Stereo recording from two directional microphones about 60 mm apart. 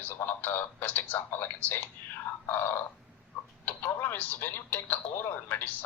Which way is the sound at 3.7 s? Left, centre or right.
Left.